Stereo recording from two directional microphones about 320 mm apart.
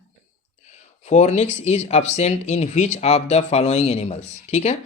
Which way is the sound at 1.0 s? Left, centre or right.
Left.